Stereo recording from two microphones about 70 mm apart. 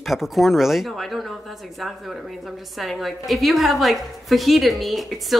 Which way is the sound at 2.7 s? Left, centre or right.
Centre.